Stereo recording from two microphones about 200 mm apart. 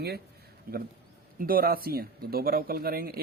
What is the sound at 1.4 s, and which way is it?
Speech, 45° right (ahead or behind).